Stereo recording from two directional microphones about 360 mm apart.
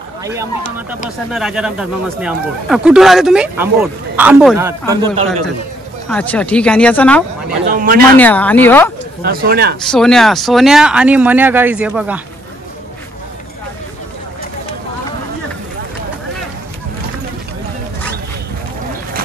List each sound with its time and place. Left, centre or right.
0.2 s a man's voice: centre
6.0 s speech: centre
7.7 s a sound: right
8.2 s speech: centre
9.2 s speech: right
9.8 s speech: centre